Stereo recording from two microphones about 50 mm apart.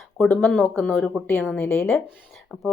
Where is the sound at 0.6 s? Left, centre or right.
Left.